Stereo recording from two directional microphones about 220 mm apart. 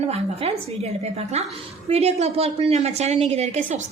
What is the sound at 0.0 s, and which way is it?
A woman's voice, 30° right (ahead or behind).